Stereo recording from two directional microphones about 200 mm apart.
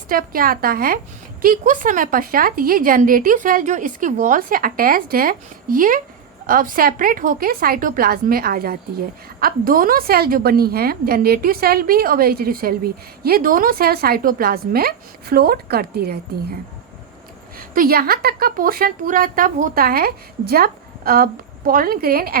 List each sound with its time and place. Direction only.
0.1 s a woman's voice: 45° right (ahead or behind)
17.6 s a woman's voice: 45° right (ahead or behind)